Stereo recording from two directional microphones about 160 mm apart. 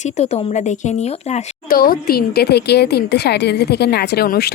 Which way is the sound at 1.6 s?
65° left (ahead or behind).